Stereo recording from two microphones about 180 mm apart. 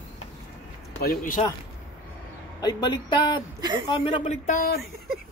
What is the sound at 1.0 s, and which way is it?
Speech, 50° left (ahead or behind).